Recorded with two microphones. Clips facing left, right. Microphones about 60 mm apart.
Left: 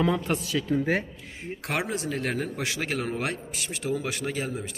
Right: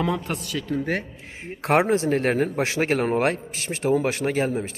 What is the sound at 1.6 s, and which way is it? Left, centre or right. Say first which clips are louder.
A man's voice: right 11 dB; right.